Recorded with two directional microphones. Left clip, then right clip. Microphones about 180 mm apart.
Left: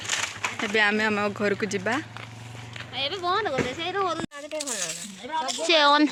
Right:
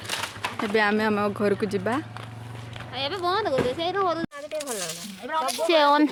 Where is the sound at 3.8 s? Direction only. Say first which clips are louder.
Right 2 dB; 10° right (ahead or behind).